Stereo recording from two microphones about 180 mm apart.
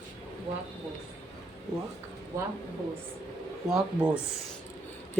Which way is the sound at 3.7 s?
5° right (ahead or behind).